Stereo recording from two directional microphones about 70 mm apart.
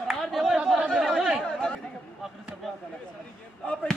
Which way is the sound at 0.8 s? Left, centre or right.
Centre.